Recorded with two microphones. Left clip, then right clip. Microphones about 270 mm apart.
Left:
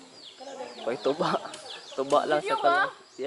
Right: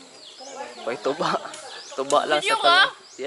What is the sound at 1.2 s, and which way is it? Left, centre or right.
Speech, centre.